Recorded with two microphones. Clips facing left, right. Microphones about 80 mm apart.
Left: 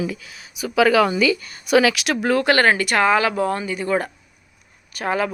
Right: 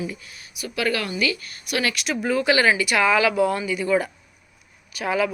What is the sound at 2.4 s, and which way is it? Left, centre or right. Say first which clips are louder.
Speech: even; left.